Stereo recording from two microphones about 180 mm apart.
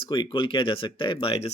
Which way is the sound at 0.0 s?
25° left (ahead or behind).